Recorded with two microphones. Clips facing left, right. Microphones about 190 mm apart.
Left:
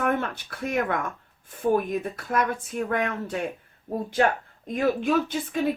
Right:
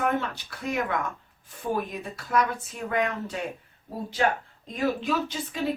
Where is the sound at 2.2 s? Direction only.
50° left (ahead or behind).